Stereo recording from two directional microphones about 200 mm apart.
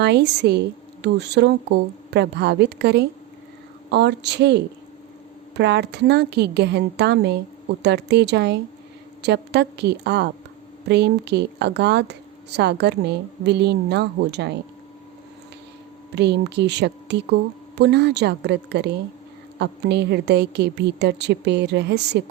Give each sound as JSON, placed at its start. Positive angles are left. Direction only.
{"t": 0.0, "sound": "speech", "side_deg": -55}
{"t": 16.1, "sound": "speech", "side_deg": -55}